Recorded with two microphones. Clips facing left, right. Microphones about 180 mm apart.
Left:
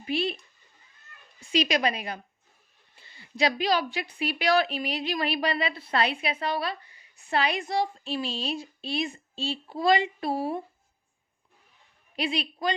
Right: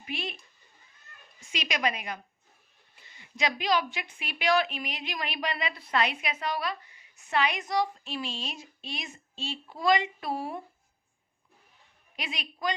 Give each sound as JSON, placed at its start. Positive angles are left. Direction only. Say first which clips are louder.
{"t": 0.0, "sound": "speech", "louder": "left 9 dB", "side_deg": 35}
{"t": 1.4, "sound": "a woman's voice", "louder": "left 7 dB", "side_deg": 35}
{"t": 12.1, "sound": "a woman's voice", "louder": "left 10 dB", "side_deg": 30}